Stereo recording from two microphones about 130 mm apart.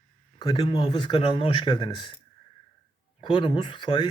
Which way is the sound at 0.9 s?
35° left (ahead or behind).